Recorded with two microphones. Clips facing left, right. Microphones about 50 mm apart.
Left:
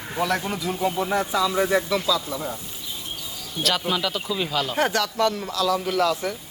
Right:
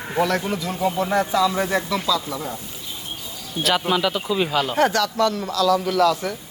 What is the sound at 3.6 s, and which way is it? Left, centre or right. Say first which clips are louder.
Speech: right 2 dB; right.